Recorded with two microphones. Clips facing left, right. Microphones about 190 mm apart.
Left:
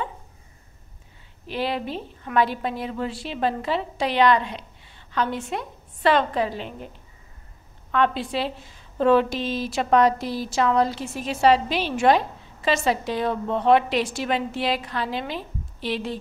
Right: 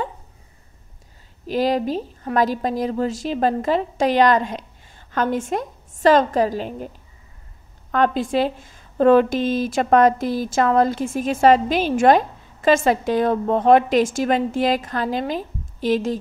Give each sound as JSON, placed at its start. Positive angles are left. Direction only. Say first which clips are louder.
{"t": 1.5, "sound": "a woman's voice", "louder": "right 7 dB", "side_deg": -40}
{"t": 7.9, "sound": "a woman's voice", "louder": "right 4 dB", "side_deg": -45}